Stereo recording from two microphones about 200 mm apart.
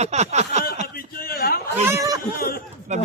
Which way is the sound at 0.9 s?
50° left (ahead or behind).